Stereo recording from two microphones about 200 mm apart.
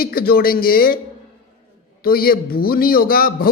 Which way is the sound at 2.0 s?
50° left (ahead or behind).